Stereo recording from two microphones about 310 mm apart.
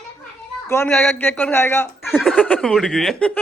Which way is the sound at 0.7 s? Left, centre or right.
Centre.